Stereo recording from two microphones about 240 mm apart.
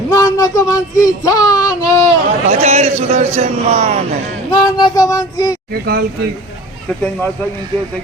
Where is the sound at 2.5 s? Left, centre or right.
Right.